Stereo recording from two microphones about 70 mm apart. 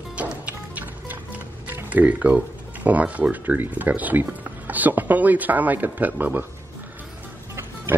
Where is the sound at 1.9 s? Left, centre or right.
Right.